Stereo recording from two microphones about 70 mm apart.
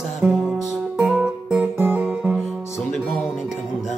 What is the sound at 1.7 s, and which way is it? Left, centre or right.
Music, right.